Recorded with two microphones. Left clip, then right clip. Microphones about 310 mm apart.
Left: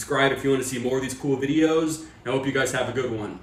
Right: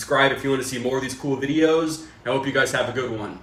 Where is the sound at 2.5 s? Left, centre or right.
Centre.